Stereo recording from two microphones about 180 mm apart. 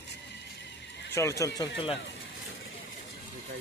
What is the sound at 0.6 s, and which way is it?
Neigh, 75° left (ahead or behind).